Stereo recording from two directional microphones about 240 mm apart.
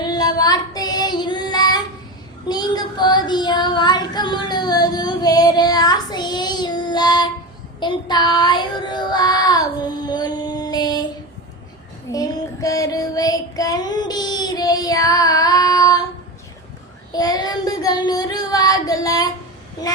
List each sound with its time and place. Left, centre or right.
0.0 s child singing: centre
10.1 s music: centre
12.1 s child singing: centre
17.1 s child singing: centre